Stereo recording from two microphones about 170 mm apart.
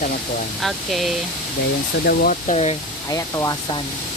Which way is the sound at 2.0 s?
60° left (ahead or behind).